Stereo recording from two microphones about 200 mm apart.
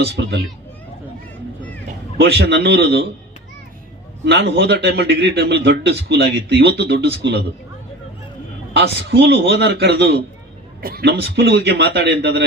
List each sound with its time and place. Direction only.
0.0 s a man's voice: 60° right (ahead or behind)
2.1 s a man's voice: 60° right (ahead or behind)
4.3 s a man's voice: 60° right (ahead or behind)
8.7 s a man's voice: 55° right (ahead or behind)